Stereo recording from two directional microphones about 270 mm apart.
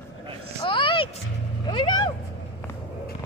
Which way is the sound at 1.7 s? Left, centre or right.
Centre.